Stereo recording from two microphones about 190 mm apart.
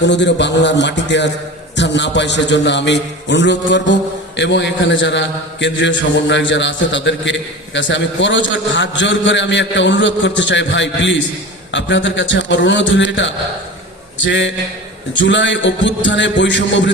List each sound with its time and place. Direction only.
0.0 s a man's voice: 65° left (ahead or behind)